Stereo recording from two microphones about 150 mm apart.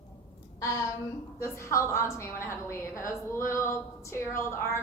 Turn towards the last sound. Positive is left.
turn(degrees=20)  # may be behind; listen again after turning